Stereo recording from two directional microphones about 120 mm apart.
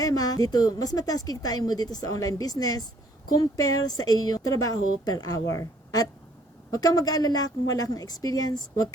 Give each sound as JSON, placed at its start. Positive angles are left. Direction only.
{"t": 0.0, "sound": "a woman's voice", "side_deg": 30}